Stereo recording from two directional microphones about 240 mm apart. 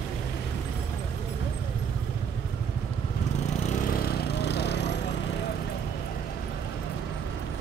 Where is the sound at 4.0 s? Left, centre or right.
Left.